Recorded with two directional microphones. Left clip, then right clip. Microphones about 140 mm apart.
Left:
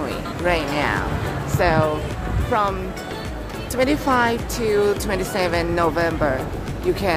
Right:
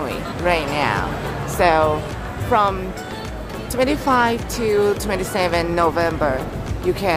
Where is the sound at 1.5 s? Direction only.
15° right (ahead or behind).